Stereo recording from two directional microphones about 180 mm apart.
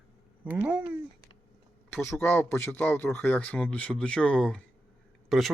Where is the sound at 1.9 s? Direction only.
15° left (ahead or behind).